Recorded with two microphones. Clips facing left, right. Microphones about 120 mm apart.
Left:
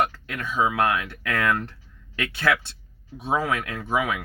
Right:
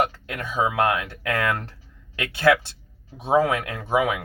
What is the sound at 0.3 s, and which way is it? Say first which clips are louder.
Speech: even; 20° right (ahead or behind).